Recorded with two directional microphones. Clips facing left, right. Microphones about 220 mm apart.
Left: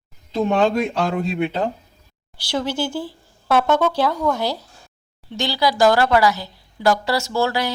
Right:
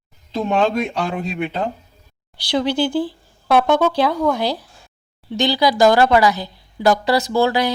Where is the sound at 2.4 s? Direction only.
15° right (ahead or behind).